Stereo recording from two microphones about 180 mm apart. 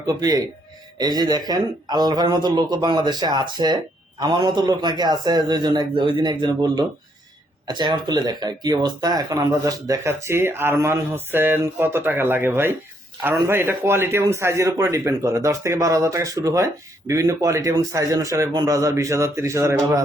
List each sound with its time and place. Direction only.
0.0 s a man's voice: 20° right (ahead or behind)